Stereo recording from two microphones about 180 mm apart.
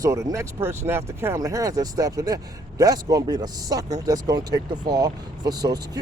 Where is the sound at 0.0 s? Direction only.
20° right (ahead or behind).